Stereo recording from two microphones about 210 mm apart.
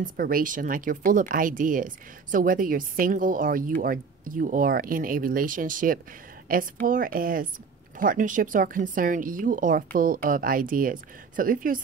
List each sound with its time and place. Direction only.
0.0 s speech: 40° right (ahead or behind)